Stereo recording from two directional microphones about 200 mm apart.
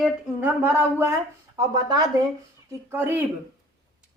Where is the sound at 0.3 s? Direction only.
10° right (ahead or behind).